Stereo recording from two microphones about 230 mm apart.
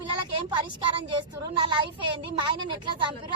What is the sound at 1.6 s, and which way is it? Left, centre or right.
Speech, right.